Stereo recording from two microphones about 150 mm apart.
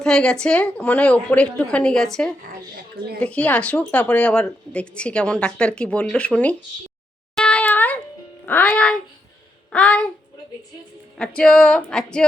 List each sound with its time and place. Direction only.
0.0 s speech: 5° left (ahead or behind)
3.2 s speech: 10° left (ahead or behind)
7.3 s a sound: 10° left (ahead or behind)
8.4 s speech: 10° left (ahead or behind)
11.2 s speech: 5° left (ahead or behind)